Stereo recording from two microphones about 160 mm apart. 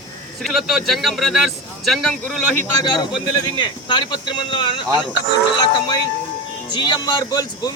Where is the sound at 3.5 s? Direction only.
30° left (ahead or behind).